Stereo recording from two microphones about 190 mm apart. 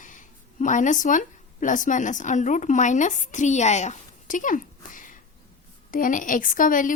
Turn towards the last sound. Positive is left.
turn(degrees=45)  # may be behind; listen again after turning